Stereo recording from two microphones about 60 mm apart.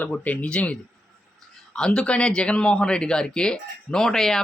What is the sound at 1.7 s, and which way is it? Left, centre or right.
A man's voice, centre.